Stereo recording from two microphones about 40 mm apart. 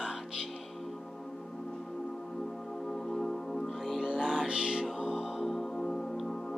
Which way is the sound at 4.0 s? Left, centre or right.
Centre.